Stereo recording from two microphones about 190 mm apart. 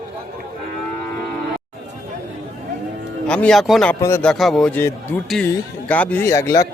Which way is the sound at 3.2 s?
5° left (ahead or behind).